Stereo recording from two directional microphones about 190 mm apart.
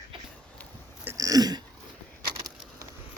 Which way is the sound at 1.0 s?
15° right (ahead or behind).